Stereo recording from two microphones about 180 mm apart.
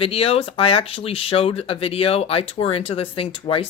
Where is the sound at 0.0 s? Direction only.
30° left (ahead or behind).